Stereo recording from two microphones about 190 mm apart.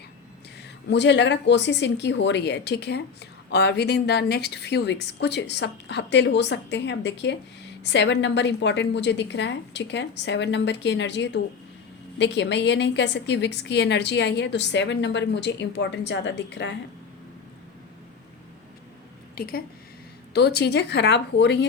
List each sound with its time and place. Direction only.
0.9 s a woman's voice: 65° left (ahead or behind)
19.4 s a woman's voice: 50° left (ahead or behind)